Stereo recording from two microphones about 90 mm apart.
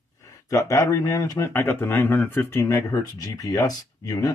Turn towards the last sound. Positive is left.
turn(degrees=40)  # may be behind; listen again after turning